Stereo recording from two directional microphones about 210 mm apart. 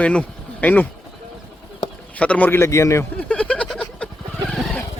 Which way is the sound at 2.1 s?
5° left (ahead or behind).